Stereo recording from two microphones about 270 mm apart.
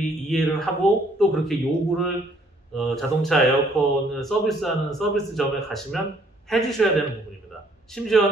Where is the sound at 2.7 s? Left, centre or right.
Centre.